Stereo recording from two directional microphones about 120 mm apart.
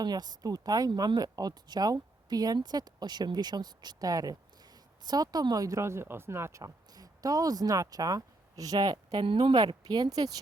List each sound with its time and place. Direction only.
0.0 s speech: 35° right (ahead or behind)
9.2 s speech: 45° right (ahead or behind); by 10.4 s 30° right (ahead or behind)